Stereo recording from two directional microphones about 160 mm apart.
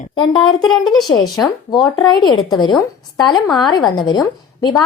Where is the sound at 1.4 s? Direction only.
10° left (ahead or behind).